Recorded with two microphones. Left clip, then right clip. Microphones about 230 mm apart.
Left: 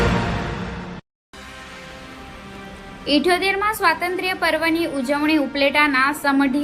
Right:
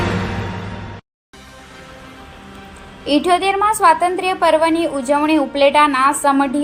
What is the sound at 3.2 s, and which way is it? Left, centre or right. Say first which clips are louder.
A woman's voice: right 5 dB; right.